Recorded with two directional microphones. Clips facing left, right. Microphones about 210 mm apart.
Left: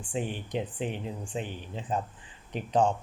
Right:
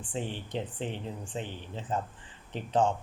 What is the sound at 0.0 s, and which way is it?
Speech, 15° left (ahead or behind).